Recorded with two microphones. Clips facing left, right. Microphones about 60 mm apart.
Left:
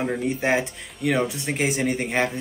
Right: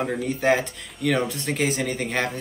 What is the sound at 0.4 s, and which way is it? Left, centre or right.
Speech, centre.